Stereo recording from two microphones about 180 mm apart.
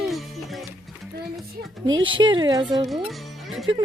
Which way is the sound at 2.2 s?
25° right (ahead or behind).